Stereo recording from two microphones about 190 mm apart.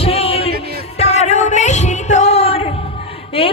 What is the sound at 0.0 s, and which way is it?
Music, 30° left (ahead or behind).